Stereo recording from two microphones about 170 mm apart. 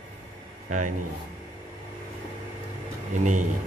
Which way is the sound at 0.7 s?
45° right (ahead or behind).